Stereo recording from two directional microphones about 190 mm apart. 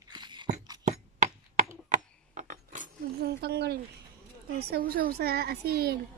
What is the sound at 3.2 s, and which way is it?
Speech, 60° right (ahead or behind).